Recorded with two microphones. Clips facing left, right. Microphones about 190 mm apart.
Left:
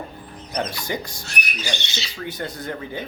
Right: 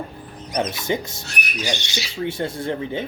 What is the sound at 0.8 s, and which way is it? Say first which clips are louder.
Speech: right 4 dB; 25° right (ahead or behind).